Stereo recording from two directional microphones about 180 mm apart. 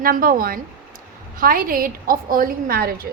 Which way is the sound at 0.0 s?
55° right (ahead or behind).